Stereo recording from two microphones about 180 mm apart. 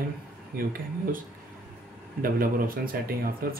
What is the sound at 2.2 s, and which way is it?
Speech, 50° right (ahead or behind).